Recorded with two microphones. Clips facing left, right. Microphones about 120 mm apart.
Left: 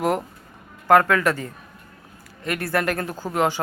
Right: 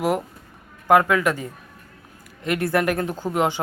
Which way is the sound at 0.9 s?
10° right (ahead or behind).